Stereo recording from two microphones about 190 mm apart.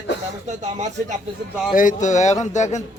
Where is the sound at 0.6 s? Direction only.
35° right (ahead or behind).